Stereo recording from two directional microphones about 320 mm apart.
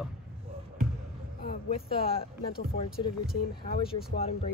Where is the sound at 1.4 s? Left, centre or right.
Left.